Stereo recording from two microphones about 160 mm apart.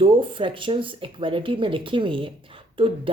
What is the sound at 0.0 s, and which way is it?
Speech, 35° right (ahead or behind).